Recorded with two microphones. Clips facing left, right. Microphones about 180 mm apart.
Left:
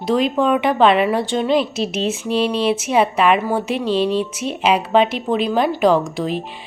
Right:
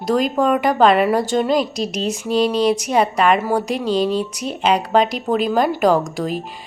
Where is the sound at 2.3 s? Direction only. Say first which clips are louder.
Right 2 dB; 40° right (ahead or behind).